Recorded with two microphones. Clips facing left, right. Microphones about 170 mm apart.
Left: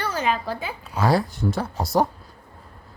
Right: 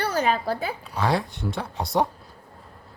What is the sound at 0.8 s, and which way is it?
Speech, centre (ahead or behind).